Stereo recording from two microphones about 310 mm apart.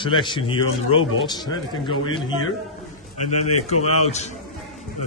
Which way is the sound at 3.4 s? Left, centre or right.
Left.